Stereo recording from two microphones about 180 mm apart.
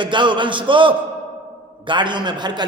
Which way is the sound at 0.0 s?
25° right (ahead or behind).